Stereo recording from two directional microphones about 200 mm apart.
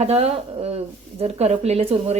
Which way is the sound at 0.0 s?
30° right (ahead or behind).